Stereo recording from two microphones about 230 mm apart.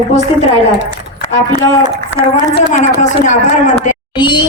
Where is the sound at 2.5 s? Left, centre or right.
Left.